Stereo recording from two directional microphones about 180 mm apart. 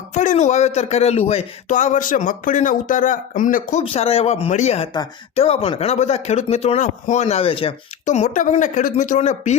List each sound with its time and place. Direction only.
0.1 s a man's voice: 45° left (ahead or behind)
3.8 s speech: 35° left (ahead or behind)